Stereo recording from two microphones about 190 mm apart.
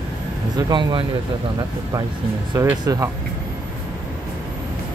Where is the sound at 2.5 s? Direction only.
15° right (ahead or behind).